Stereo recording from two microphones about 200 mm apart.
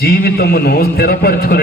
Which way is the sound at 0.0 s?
50° left (ahead or behind).